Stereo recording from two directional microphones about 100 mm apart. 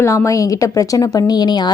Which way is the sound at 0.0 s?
30° left (ahead or behind).